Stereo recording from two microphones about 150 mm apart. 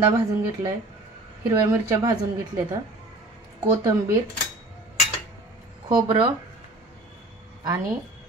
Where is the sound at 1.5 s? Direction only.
20° right (ahead or behind).